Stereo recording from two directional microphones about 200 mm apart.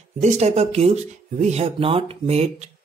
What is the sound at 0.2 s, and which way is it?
Speech, 35° right (ahead or behind).